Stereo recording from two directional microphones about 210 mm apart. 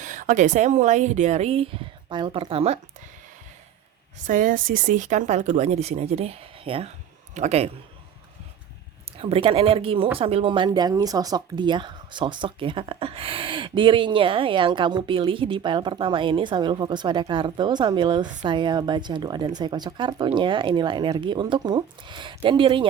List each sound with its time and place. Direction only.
0.0 s speech: 35° right (ahead or behind)
4.3 s speech: 40° right (ahead or behind)
9.2 s speech: 25° right (ahead or behind)